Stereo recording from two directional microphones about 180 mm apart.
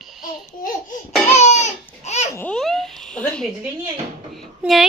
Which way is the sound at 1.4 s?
40° left (ahead or behind).